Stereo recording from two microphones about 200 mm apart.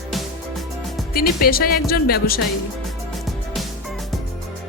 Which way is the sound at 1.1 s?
50° left (ahead or behind).